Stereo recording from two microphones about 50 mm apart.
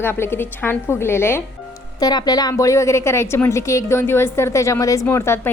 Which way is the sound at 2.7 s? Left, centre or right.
Left.